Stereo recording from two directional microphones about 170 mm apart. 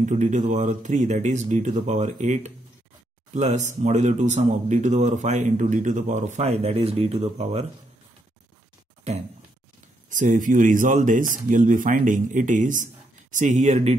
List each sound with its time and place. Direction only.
0.0 s speech: 45° right (ahead or behind)
9.1 s speech: 40° right (ahead or behind)